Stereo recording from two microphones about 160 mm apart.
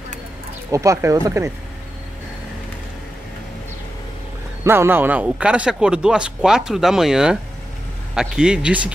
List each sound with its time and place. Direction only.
0.7 s speech: 20° right (ahead or behind)
4.6 s speech: 15° right (ahead or behind)